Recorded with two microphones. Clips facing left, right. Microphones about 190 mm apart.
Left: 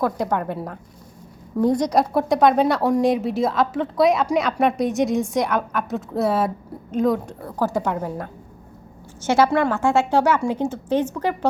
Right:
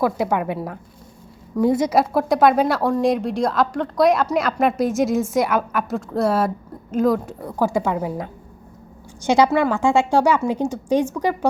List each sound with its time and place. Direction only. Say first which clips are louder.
0.0 s a woman's voice: right 2 dB; 10° right (ahead or behind)
7.4 s a woman's voice: right 2 dB; 10° right (ahead or behind)